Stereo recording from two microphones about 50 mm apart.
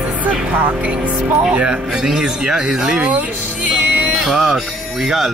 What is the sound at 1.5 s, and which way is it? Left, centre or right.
Speech, centre.